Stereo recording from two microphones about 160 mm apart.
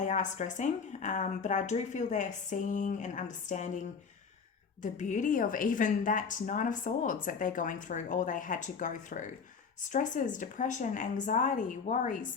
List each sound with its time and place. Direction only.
0.0 s a woman's voice: 50° left (ahead or behind)